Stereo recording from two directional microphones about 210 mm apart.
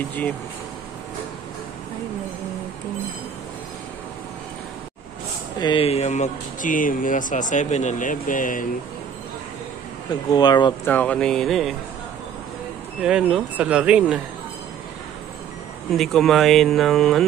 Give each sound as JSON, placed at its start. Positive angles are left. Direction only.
{"t": 5.6, "sound": "speech", "side_deg": 25}
{"t": 10.3, "sound": "speech", "side_deg": 20}
{"t": 10.9, "sound": "speech", "side_deg": 5}
{"t": 13.0, "sound": "speech", "side_deg": -5}
{"t": 15.9, "sound": "speech", "side_deg": 0}